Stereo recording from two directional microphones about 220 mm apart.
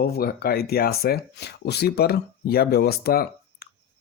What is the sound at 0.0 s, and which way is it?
Speech, 45° left (ahead or behind).